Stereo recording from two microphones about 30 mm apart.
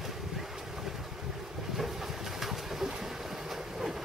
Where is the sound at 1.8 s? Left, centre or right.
Centre.